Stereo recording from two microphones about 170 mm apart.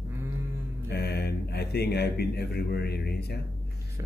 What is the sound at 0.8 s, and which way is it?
Speech, 70° left (ahead or behind).